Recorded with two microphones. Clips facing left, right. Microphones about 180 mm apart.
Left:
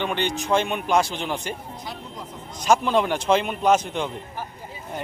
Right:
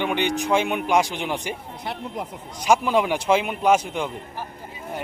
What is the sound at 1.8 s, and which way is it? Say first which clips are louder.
Speech: right 5 dB; 65° right (ahead or behind).